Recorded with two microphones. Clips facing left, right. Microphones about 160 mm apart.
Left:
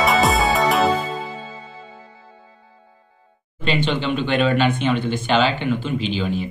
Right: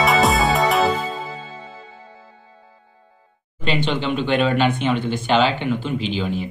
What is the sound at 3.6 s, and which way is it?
Speech, 15° right (ahead or behind).